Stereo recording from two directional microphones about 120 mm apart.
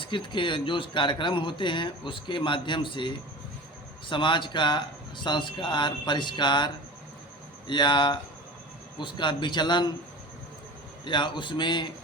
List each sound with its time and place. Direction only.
0.0 s speech: 45° left (ahead or behind)
7.7 s speech: 40° left (ahead or behind)
11.0 s speech: 40° left (ahead or behind)